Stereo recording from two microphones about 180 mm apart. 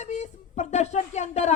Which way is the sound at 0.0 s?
40° left (ahead or behind).